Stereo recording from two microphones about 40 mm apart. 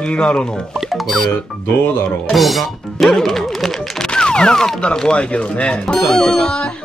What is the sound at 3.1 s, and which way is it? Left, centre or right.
Neigh, centre.